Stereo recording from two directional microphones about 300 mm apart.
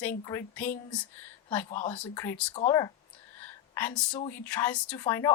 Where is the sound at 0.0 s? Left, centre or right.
Centre.